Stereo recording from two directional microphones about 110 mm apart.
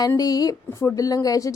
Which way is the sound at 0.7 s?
25° left (ahead or behind).